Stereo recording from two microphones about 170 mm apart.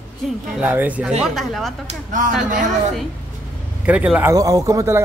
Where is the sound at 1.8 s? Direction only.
50° right (ahead or behind).